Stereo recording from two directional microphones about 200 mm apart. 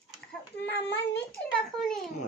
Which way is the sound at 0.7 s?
60° left (ahead or behind).